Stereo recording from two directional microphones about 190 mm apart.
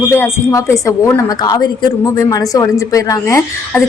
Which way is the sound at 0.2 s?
15° left (ahead or behind).